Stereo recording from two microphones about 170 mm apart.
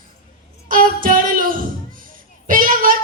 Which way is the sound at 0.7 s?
55° right (ahead or behind).